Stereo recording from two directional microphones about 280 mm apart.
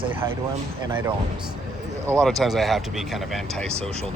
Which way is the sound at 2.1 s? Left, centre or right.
Centre.